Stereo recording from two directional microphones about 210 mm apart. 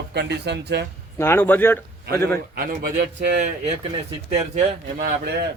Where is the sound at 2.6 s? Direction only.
50° right (ahead or behind).